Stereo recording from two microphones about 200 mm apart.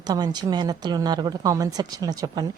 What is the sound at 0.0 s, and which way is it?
Speech, 20° right (ahead or behind).